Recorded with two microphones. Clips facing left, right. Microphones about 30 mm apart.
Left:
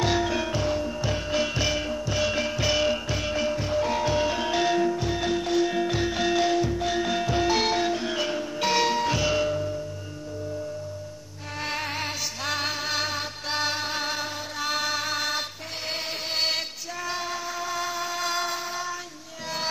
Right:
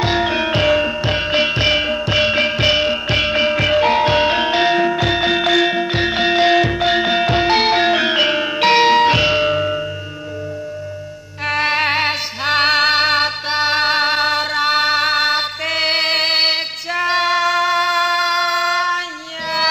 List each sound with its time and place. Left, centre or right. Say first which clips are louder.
0.0 s music: right 7 dB; right
0.6 s music: right 12 dB; right
1.0 s music: right 10 dB; right
3.1 s music: right 11 dB; right
4.9 s music: right 10 dB; right
5.7 s music: right 8 dB; right
6.5 s music: right 10 dB; right
7.9 s music: right 12 dB; right
11.4 s music: right 14 dB; right
13.5 s music: right 9 dB; right
15.7 s music: right 16 dB; right
16.3 s music: right 10 dB; right